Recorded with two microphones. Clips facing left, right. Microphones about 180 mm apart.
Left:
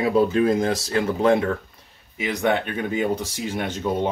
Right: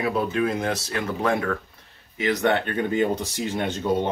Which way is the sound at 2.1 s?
15° left (ahead or behind).